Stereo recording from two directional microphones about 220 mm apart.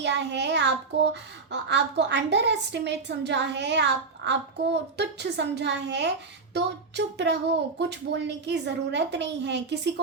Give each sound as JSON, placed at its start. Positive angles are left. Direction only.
{"t": 0.0, "sound": "a child's voice", "side_deg": -50}